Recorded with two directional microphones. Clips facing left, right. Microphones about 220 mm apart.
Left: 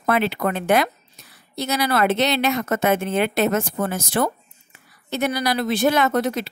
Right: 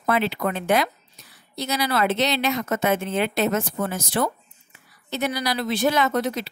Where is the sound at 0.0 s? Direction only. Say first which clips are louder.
Left 2 dB; 55° left (ahead or behind).